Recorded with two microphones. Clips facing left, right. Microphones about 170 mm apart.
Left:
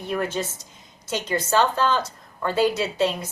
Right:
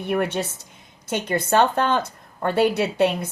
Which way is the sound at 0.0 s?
65° right (ahead or behind).